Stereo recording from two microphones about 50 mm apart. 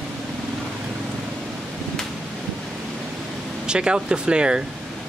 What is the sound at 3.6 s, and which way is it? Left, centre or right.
Speech, centre.